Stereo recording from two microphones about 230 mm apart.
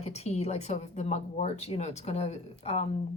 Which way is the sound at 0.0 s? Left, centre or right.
Left.